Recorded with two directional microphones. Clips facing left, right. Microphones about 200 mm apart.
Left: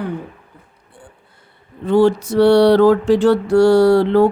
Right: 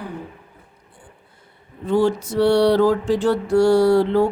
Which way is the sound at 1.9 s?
70° left (ahead or behind).